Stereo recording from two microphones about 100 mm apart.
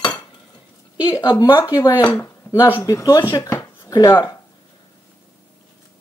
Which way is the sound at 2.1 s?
30° left (ahead or behind).